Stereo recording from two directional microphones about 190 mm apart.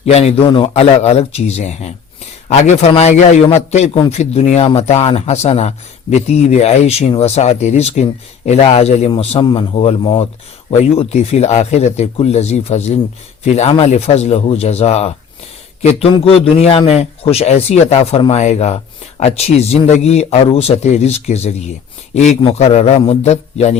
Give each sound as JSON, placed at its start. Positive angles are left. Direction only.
{"t": 0.0, "sound": "a man's voice", "side_deg": 35}